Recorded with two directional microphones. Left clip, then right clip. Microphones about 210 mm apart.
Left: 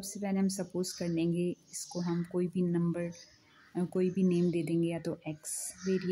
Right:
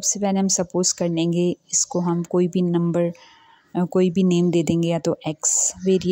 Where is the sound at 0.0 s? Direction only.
35° right (ahead or behind).